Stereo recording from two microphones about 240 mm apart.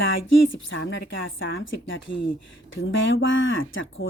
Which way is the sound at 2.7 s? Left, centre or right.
Left.